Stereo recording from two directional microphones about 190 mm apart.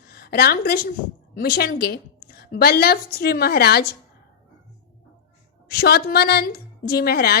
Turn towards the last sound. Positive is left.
turn(degrees=55)  # may be behind; listen again after turning